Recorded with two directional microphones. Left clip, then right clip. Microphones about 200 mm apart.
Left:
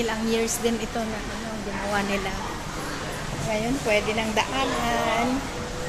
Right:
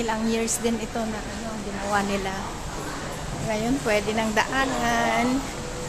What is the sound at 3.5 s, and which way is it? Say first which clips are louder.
Speech: even; 20° right (ahead or behind).